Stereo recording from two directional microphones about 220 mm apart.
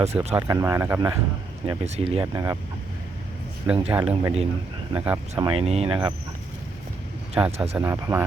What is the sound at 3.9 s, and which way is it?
Speech, 10° right (ahead or behind).